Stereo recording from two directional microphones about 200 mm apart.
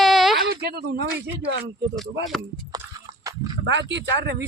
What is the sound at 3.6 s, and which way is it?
Speech, 60° right (ahead or behind).